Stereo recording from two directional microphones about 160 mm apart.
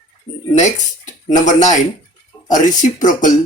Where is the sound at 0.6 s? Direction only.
50° left (ahead or behind).